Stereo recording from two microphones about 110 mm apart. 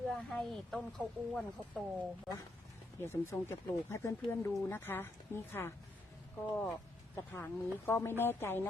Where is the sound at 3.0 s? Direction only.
25° left (ahead or behind).